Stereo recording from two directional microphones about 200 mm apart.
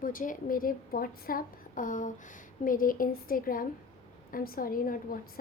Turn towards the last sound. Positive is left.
turn(degrees=45)  # may be behind; listen again after turning